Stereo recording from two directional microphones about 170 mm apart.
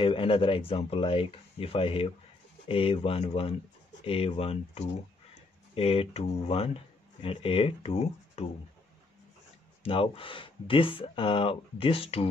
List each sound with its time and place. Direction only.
0.0 s speech: 30° left (ahead or behind)
9.8 s speech: 30° left (ahead or behind)